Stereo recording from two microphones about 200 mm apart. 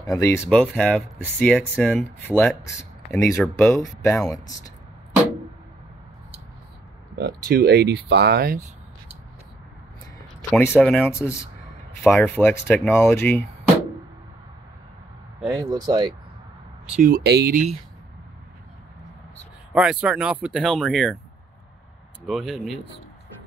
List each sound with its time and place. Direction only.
0.1 s speech: 15° left (ahead or behind)
7.2 s speech: 50° right (ahead or behind)
10.5 s speech: 10° left (ahead or behind)
15.5 s speech: 20° right (ahead or behind)
16.9 s speech: 45° right (ahead or behind)
19.7 s speech: 5° right (ahead or behind)
22.2 s speech: centre (ahead or behind)